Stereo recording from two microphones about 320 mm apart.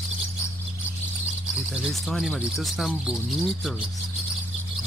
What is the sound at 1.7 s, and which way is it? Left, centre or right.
Speech, centre.